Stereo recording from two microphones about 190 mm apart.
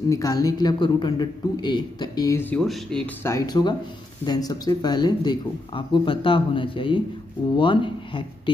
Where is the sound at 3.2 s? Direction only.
20° left (ahead or behind).